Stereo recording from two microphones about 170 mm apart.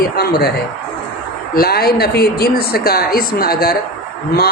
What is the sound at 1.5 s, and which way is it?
A man's voice, 65° left (ahead or behind).